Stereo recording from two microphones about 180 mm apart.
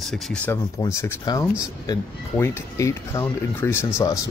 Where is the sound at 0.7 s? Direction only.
15° left (ahead or behind).